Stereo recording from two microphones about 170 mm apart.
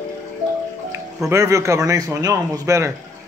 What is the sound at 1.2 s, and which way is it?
A man's voice, 20° right (ahead or behind).